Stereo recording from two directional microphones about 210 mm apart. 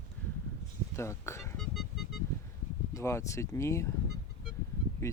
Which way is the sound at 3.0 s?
15° left (ahead or behind).